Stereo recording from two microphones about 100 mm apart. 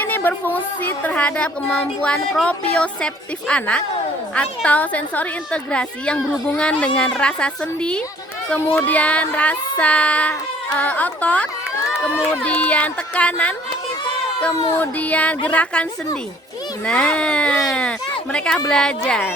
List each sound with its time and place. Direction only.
0.0 s a woman's voice: 20° left (ahead or behind)
14.8 s a woman's voice: 15° left (ahead or behind)